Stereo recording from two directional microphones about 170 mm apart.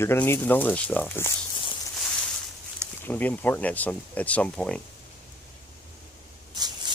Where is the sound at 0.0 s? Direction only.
15° left (ahead or behind).